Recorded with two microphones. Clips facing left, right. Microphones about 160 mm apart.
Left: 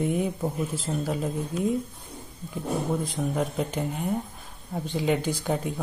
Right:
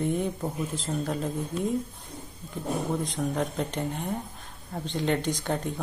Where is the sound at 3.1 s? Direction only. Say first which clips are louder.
Left 1 dB; 5° left (ahead or behind).